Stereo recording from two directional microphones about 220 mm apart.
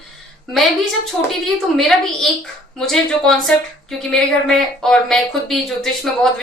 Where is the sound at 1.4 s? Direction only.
Centre (ahead or behind).